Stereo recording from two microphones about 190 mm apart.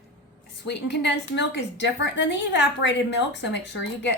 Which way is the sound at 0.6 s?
65° left (ahead or behind).